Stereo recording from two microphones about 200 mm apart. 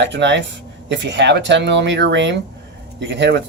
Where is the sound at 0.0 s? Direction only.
60° right (ahead or behind).